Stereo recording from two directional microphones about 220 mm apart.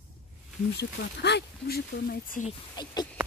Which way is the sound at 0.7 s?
50° left (ahead or behind).